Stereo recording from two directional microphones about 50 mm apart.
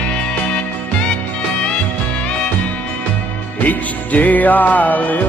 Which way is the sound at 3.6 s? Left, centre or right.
Left.